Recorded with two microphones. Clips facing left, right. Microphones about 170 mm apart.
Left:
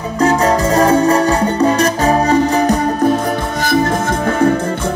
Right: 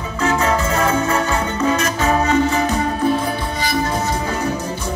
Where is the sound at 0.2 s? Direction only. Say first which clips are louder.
Left 5 dB; 40° left (ahead or behind).